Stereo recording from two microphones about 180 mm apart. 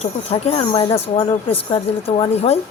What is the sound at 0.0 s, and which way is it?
A woman's voice, 35° left (ahead or behind).